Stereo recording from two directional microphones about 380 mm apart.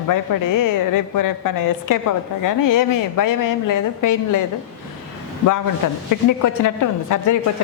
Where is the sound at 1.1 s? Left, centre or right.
Left.